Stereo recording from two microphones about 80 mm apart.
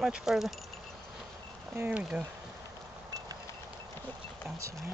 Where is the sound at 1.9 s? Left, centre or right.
Centre.